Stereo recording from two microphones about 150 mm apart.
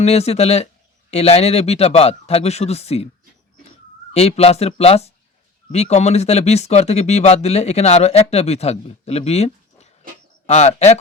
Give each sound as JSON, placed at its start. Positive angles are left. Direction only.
{"t": 0.0, "sound": "speech", "side_deg": 45}
{"t": 4.1, "sound": "speech", "side_deg": 45}